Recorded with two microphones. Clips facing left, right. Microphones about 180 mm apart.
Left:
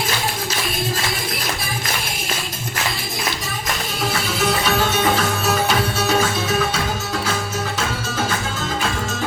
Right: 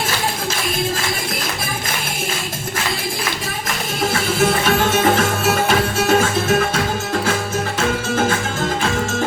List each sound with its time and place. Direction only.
4.4 s music: 50° right (ahead or behind)